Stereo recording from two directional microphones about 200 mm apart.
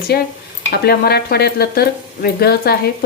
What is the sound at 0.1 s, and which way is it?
Speech, 55° left (ahead or behind).